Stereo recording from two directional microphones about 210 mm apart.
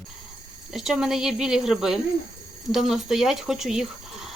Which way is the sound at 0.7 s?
Centre (ahead or behind).